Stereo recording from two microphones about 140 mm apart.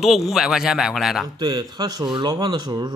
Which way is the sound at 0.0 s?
Centre (ahead or behind).